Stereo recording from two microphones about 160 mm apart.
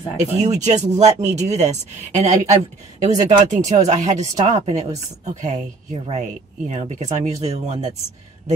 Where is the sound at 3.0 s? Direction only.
50° right (ahead or behind).